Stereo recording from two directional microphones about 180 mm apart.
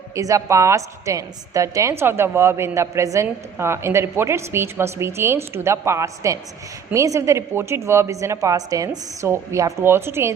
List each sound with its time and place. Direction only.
0.1 s a woman's voice: 20° right (ahead or behind)